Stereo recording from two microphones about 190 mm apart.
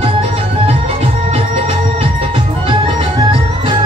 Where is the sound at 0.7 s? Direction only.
35° right (ahead or behind).